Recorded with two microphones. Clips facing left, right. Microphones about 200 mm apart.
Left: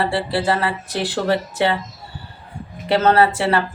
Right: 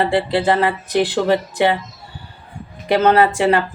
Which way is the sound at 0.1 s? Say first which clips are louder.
Right 4 dB; 20° right (ahead or behind).